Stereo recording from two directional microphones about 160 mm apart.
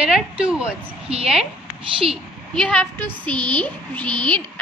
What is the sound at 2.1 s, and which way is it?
A woman's voice, 5° left (ahead or behind).